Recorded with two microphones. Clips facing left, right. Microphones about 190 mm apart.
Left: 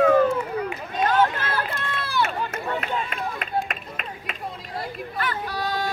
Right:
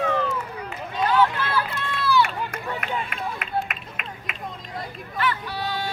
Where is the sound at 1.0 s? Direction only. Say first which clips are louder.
Even; 45° left (ahead or behind).